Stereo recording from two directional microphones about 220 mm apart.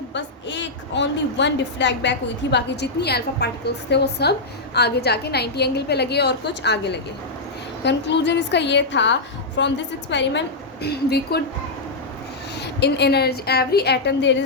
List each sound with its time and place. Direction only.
0.1 s a woman's voice: 55° left (ahead or behind)
12.8 s a woman's voice: 50° left (ahead or behind)